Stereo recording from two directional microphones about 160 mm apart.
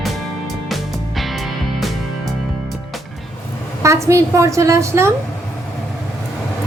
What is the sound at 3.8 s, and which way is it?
A woman's voice, 20° right (ahead or behind).